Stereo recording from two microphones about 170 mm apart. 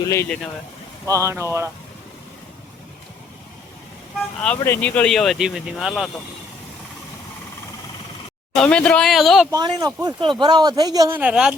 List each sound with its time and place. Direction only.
0.1 s speech: 15° left (ahead or behind)
1.0 s speech: 20° right (ahead or behind)
4.4 s speech: 15° left (ahead or behind); by 6.1 s centre (ahead or behind)
8.5 s speech: 5° left (ahead or behind)
9.5 s speech: 25° right (ahead or behind)
11.2 s speech: 5° right (ahead or behind)